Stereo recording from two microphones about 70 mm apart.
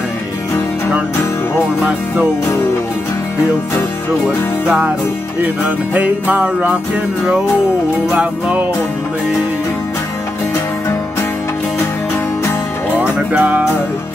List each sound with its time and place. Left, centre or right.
5.9 s music: right
8.1 s music: centre
12.9 s music: right